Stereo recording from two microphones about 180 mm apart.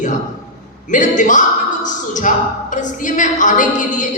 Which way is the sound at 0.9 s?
45° left (ahead or behind).